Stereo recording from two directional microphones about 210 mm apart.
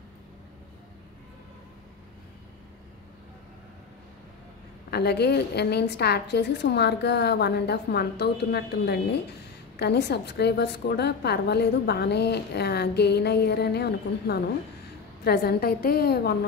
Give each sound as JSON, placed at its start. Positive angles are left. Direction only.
{"t": 4.9, "sound": "a woman's voice", "side_deg": 50}